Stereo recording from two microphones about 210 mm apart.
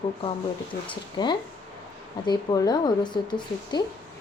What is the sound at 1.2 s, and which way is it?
A woman's voice, 20° left (ahead or behind).